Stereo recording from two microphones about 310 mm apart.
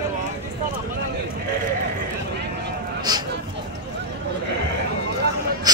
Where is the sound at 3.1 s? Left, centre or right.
Centre.